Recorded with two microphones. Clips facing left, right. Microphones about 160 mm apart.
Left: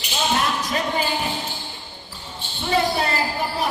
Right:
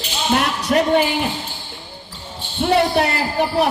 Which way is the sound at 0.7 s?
60° right (ahead or behind).